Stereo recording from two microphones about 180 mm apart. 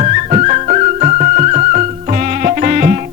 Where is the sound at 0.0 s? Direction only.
40° right (ahead or behind).